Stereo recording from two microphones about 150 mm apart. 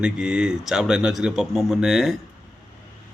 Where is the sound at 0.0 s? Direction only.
5° right (ahead or behind).